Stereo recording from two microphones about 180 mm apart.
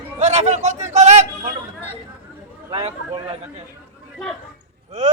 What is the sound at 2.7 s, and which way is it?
Speech, 35° right (ahead or behind).